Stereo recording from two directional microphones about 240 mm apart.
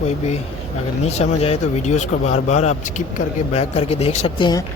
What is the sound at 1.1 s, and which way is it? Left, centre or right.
Speech, left.